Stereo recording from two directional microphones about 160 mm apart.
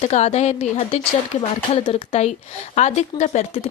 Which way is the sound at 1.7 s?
35° left (ahead or behind).